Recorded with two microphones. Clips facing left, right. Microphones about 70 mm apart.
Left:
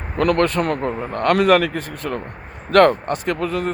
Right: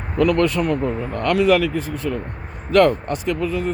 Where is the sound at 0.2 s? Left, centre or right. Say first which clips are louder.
Even; left.